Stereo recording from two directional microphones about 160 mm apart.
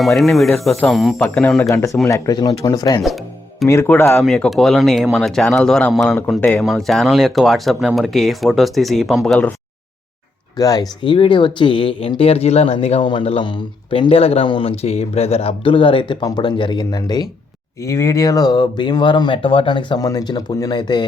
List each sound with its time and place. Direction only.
0.2 s speech: centre (ahead or behind)
1.5 s speech: 20° left (ahead or behind)
4.2 s speech: centre (ahead or behind)
10.6 s speech: 25° left (ahead or behind)